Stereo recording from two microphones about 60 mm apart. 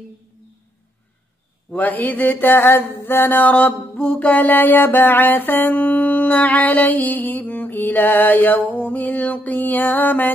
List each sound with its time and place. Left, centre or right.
1.7 s mantra: left